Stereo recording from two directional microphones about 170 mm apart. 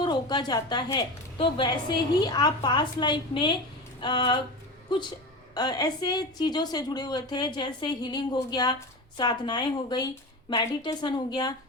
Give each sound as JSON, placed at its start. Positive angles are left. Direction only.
{"t": 0.0, "sound": "a woman's voice", "side_deg": 25}